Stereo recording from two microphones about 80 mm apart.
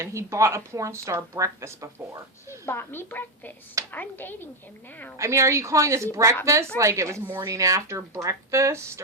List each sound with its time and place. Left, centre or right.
0.0 s speech: right
2.6 s a woman's voice: left
5.1 s speech: right